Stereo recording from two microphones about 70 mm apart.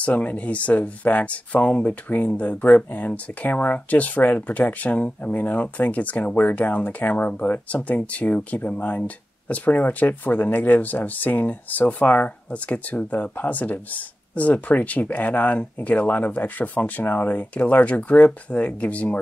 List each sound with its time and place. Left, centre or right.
0.0 s speech: left